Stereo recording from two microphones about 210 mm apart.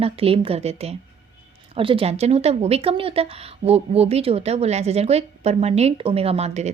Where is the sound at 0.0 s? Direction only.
25° right (ahead or behind).